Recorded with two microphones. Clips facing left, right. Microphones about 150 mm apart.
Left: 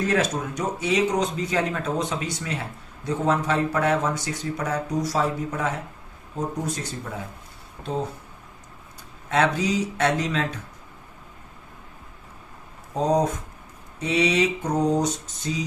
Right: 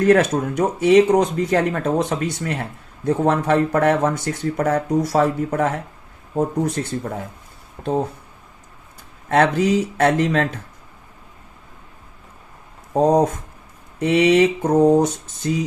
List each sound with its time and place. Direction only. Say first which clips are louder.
0.0 s speech: right 8 dB; 60° right (ahead or behind)
9.3 s speech: right 6 dB; 55° right (ahead or behind)
12.9 s speech: right 6 dB; 60° right (ahead or behind)